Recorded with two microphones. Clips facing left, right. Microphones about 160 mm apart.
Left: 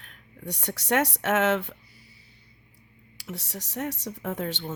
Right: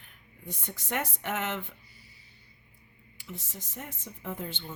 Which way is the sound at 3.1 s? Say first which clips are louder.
Left 6 dB; 80° left.